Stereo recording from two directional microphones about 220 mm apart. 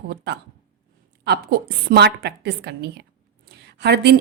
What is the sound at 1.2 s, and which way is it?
A woman's voice, 50° right (ahead or behind).